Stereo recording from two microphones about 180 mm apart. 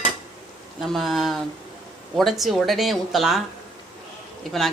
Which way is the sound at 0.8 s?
Centre (ahead or behind).